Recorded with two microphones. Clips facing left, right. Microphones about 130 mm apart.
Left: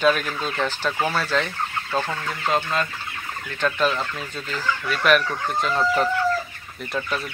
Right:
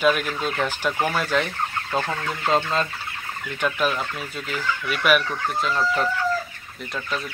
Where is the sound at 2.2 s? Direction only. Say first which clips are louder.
Right 1 dB; 20° right (ahead or behind).